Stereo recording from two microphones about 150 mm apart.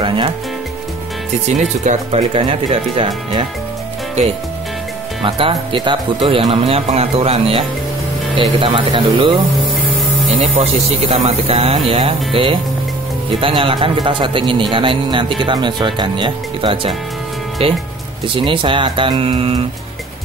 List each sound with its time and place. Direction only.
0.0 s speech: 35° right (ahead or behind)
1.5 s speech: 50° right (ahead or behind)
4.2 s speech: 45° right (ahead or behind)
5.2 s speech: 35° right (ahead or behind)
10.4 s speech: 55° right (ahead or behind)
13.4 s speech: 35° right (ahead or behind)